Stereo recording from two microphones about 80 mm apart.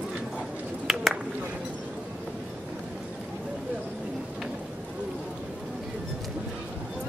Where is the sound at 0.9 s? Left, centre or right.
Centre.